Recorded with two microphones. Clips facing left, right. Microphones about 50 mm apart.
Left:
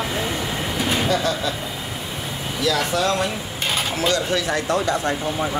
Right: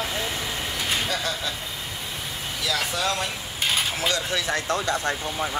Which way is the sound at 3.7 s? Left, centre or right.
Centre.